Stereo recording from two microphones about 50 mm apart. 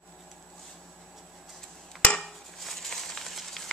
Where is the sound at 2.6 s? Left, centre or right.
Centre.